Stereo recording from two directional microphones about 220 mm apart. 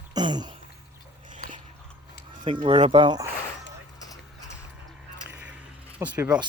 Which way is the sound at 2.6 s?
25° right (ahead or behind).